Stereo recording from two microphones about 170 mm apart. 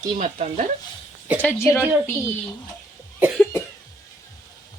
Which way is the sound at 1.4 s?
15° left (ahead or behind).